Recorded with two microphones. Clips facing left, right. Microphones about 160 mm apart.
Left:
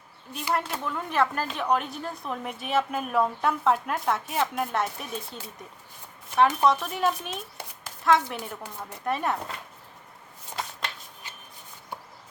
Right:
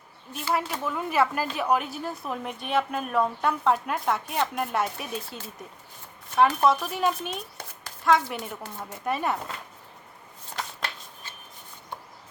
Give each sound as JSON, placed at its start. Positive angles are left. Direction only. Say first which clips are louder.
{"t": 0.5, "sound": "speech", "louder": "right 1 dB", "side_deg": -5}